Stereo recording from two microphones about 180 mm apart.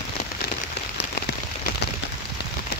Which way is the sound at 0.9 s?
65° left (ahead or behind).